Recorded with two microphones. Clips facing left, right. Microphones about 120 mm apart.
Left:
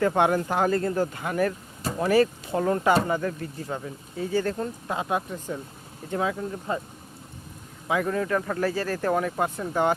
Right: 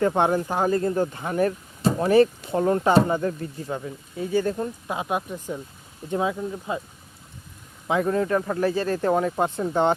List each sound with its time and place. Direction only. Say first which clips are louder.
0.0 s speech: right 1 dB; 20° right (ahead or behind)
4.2 s speech: right 2 dB; 15° right (ahead or behind)
6.5 s speech: even; 10° right (ahead or behind)
7.9 s speech: right 3 dB; 25° right (ahead or behind)